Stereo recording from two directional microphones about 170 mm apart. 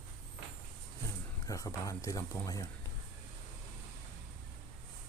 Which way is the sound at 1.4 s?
20° left (ahead or behind).